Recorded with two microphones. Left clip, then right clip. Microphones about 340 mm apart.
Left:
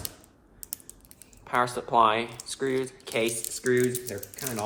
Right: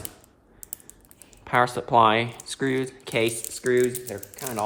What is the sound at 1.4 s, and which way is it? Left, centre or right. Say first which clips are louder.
Speech: right 4 dB; right.